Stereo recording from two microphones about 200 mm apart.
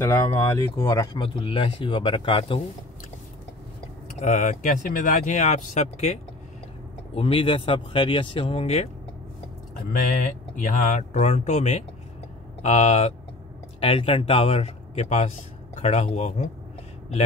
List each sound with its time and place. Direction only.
0.1 s speech: 15° left (ahead or behind)
4.2 s speech: 35° left (ahead or behind)
7.2 s speech: 30° left (ahead or behind)
10.5 s speech: 40° left (ahead or behind)